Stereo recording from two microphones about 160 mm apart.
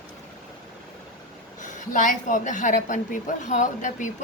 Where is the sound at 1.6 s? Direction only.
50° left (ahead or behind).